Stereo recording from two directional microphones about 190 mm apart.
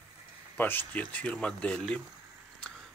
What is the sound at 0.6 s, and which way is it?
Speech, 10° left (ahead or behind).